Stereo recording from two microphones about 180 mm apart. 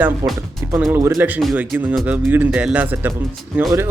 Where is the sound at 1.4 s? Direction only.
Centre (ahead or behind).